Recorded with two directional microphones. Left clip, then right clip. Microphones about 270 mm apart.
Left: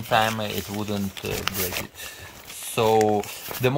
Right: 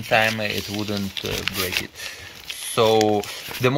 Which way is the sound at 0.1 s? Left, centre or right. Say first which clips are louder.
Right 3 dB; centre.